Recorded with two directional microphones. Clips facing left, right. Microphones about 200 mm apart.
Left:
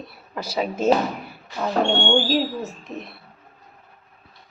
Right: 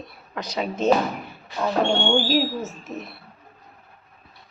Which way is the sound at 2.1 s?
5° right (ahead or behind).